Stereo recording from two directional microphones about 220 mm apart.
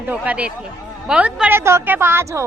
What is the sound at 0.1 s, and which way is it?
A child's voice, 5° right (ahead or behind).